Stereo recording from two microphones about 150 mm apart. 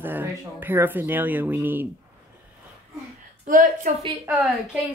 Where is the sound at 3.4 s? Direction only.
60° right (ahead or behind).